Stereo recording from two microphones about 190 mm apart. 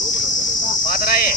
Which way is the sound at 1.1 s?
50° left (ahead or behind).